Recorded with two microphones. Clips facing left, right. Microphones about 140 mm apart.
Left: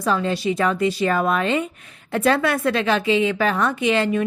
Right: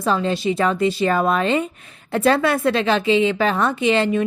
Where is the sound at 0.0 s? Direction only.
25° right (ahead or behind).